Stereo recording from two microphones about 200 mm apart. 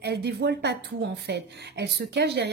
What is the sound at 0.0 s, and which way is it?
Speech, 55° right (ahead or behind).